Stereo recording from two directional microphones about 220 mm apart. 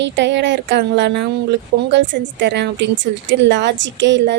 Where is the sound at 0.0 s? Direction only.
50° right (ahead or behind).